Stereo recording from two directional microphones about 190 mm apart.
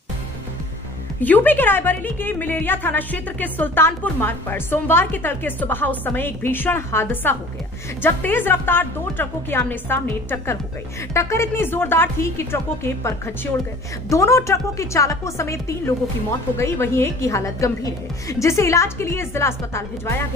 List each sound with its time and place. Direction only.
1.2 s a woman's voice: 10° left (ahead or behind)